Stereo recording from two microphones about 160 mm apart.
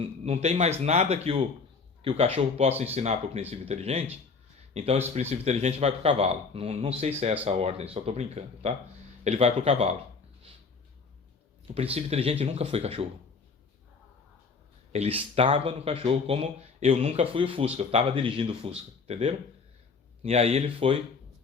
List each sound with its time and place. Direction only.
0.3 s speech: 40° right (ahead or behind)
11.7 s speech: 40° right (ahead or behind)
14.9 s speech: 40° right (ahead or behind)